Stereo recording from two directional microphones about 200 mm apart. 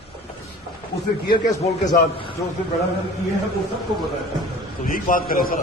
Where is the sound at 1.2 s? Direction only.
25° left (ahead or behind).